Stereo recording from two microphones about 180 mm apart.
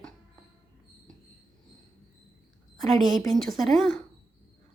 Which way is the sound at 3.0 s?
25° right (ahead or behind).